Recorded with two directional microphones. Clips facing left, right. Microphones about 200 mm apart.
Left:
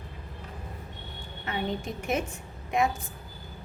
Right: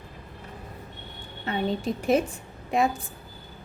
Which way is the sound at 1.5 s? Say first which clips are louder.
Right 5 dB; 35° right (ahead or behind).